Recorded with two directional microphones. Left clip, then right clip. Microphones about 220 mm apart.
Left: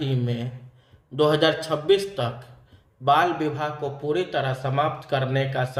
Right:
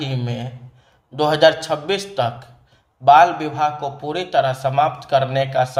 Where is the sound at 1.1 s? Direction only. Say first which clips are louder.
Right 6 dB; 20° right (ahead or behind).